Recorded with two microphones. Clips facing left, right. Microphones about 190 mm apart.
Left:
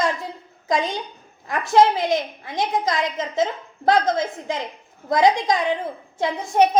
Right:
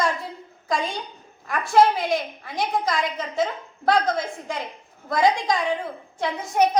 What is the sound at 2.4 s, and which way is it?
A woman's voice, 20° left (ahead or behind).